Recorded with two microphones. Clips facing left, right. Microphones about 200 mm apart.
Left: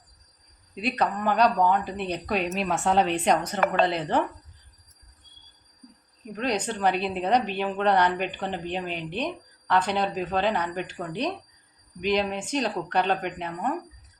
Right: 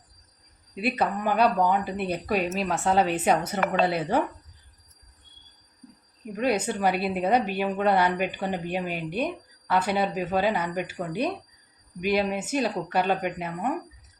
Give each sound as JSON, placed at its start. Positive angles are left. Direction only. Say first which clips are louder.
{"t": 0.8, "sound": "a woman's voice", "louder": "even", "side_deg": -5}
{"t": 6.3, "sound": "a woman's voice", "louder": "right 3 dB", "side_deg": -5}